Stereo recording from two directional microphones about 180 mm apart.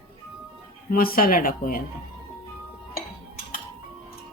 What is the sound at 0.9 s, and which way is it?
Speech, 55° left (ahead or behind).